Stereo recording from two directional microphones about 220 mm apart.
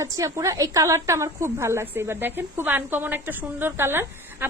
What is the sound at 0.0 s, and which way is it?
A woman's voice, 15° right (ahead or behind).